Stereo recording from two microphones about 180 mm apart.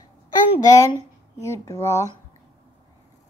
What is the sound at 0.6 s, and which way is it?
A woman's voice, 20° left (ahead or behind).